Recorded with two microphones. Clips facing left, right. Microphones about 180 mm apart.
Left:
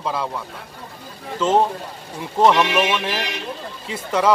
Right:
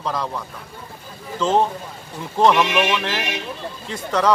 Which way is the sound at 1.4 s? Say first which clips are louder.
Left 1 dB; 5° left (ahead or behind).